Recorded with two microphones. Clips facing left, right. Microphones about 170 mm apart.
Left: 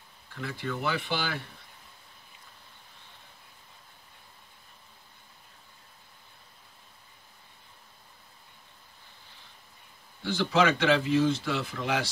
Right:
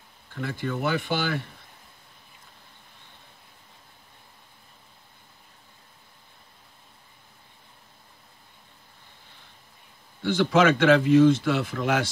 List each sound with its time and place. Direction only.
0.3 s speech: 50° right (ahead or behind)
10.2 s speech: 55° right (ahead or behind)